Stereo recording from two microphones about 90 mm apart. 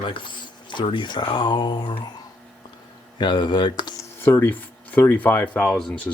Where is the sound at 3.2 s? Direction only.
55° left (ahead or behind).